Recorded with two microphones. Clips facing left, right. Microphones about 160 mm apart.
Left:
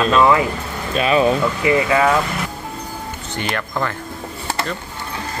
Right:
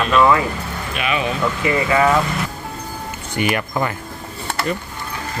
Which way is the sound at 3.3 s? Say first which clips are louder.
Right 4 dB; 10° right (ahead or behind).